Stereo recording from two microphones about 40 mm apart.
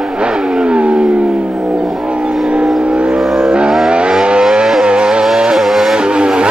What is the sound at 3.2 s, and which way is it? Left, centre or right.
Vehicle, centre.